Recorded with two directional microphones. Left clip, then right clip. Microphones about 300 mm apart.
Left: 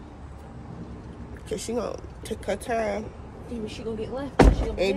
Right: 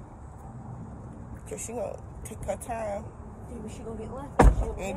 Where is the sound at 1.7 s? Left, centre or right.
Centre.